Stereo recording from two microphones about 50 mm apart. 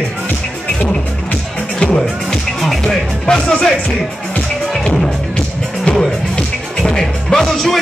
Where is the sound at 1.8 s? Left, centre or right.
Centre.